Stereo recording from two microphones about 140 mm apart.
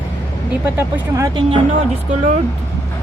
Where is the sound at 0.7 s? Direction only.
20° right (ahead or behind).